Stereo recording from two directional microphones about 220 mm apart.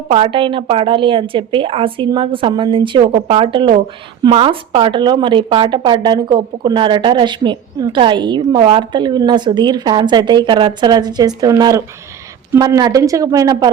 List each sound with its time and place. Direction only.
0.1 s a woman's voice: 25° right (ahead or behind)